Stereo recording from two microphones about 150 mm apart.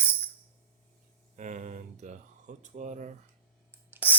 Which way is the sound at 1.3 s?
55° right (ahead or behind).